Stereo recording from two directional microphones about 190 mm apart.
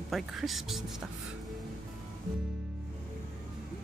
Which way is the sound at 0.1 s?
Centre (ahead or behind).